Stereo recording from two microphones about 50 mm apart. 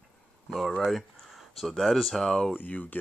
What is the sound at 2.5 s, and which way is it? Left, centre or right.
Speech, left.